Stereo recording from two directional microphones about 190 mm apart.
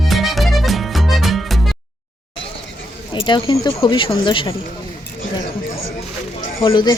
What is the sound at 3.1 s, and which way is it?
Speech, 25° left (ahead or behind).